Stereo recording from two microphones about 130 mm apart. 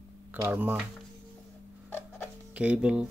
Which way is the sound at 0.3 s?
10° right (ahead or behind).